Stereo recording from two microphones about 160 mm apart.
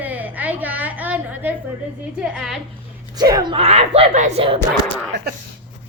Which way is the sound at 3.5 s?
40° right (ahead or behind).